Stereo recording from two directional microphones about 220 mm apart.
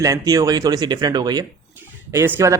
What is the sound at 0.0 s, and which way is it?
Speech, 15° right (ahead or behind).